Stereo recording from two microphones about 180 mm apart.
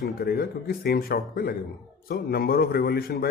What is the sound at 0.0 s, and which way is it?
Speech, 55° left (ahead or behind).